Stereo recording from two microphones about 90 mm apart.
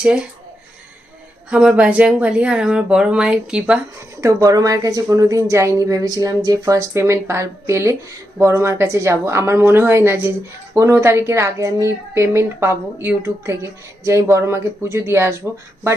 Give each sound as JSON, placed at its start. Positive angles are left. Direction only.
{"t": 0.0, "sound": "speech", "side_deg": -10}
{"t": 1.5, "sound": "speech", "side_deg": -10}
{"t": 4.2, "sound": "speech", "side_deg": -40}